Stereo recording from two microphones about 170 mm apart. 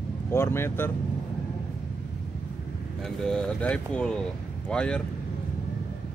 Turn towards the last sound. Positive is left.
turn(degrees=5)  # may be behind; listen again after turning